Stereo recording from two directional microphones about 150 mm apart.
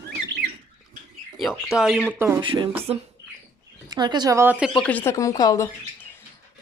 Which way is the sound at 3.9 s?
30° right (ahead or behind).